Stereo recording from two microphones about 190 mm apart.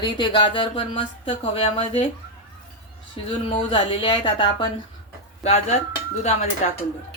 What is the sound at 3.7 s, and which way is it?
A woman's voice, 25° left (ahead or behind).